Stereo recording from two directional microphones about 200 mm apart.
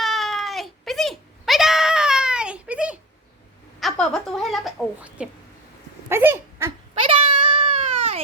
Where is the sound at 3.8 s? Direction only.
Centre (ahead or behind).